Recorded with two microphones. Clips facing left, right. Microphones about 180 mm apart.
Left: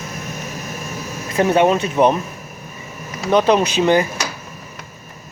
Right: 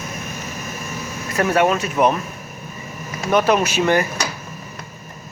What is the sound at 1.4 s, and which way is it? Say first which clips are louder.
Speech: left 3 dB; 25° left (ahead or behind).